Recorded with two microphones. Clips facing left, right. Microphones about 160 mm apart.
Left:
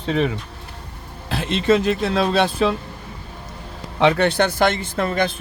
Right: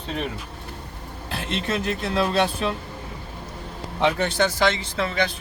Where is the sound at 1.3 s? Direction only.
90° left.